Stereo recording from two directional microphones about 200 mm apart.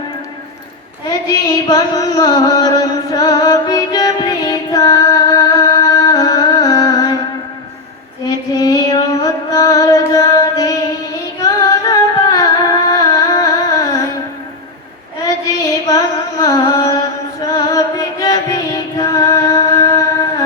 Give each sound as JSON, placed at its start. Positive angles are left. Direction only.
{"t": 1.3, "sound": "music", "side_deg": 20}
{"t": 8.5, "sound": "female singing", "side_deg": 20}
{"t": 9.2, "sound": "music", "side_deg": 15}
{"t": 11.3, "sound": "singing", "side_deg": 20}
{"t": 15.4, "sound": "music", "side_deg": 15}